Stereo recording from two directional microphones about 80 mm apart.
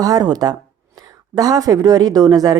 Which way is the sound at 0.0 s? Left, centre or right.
Right.